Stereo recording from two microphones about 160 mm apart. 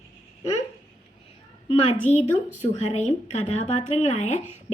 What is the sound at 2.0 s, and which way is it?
A woman's voice, 45° left (ahead or behind).